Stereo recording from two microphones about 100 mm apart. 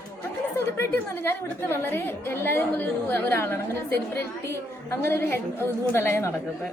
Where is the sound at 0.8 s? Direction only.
25° left (ahead or behind).